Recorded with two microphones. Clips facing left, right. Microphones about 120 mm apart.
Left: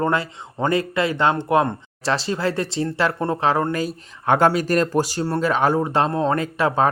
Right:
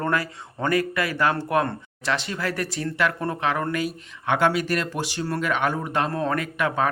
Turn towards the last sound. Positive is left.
turn(degrees=30)  # may be behind; listen again after turning